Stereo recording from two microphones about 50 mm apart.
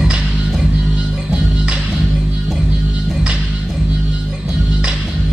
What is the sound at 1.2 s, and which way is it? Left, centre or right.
Music, centre.